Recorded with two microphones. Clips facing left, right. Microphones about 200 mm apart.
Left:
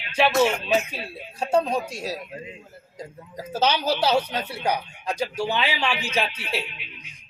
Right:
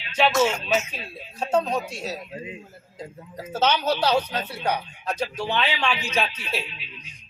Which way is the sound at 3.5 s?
10° left (ahead or behind).